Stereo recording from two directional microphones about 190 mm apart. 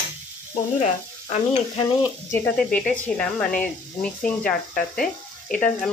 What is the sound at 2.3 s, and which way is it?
Speech, 10° left (ahead or behind).